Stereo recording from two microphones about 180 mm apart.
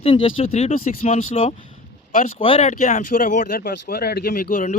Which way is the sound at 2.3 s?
30° left (ahead or behind).